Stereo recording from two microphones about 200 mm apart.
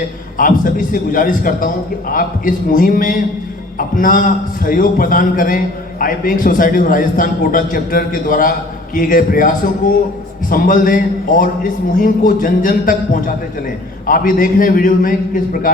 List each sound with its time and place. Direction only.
0.3 s a man's voice: 45° left (ahead or behind)